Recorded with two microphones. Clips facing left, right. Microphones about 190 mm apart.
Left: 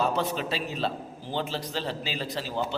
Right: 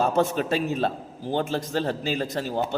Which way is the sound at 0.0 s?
50° right (ahead or behind).